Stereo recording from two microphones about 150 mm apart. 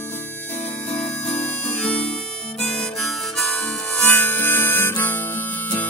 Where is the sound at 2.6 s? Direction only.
5° left (ahead or behind).